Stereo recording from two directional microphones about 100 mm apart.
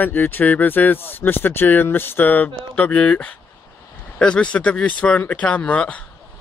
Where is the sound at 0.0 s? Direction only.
20° left (ahead or behind).